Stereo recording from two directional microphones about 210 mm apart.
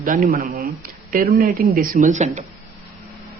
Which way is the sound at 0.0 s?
40° right (ahead or behind).